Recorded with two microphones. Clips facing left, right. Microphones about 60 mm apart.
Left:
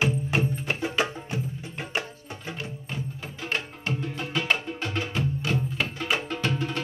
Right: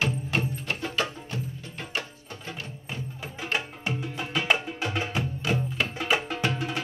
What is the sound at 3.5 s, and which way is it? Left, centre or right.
Music, centre.